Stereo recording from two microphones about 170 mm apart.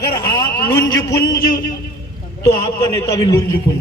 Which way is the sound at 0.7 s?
15° left (ahead or behind).